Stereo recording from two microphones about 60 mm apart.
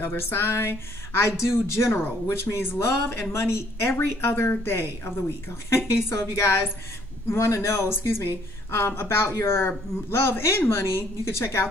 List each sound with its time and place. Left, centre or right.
0.0 s speech: left